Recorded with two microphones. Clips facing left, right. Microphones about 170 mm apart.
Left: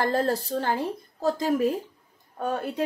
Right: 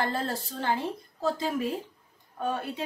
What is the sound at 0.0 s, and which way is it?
A woman's voice, 45° left (ahead or behind).